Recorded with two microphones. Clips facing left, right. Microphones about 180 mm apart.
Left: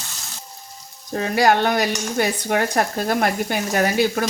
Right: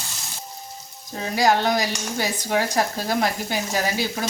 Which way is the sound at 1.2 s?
60° left (ahead or behind).